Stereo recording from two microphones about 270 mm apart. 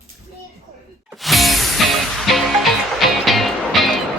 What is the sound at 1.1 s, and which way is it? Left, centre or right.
Music, centre.